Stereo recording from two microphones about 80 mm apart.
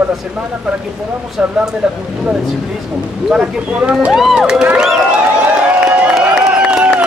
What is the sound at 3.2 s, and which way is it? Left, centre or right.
Speech, centre.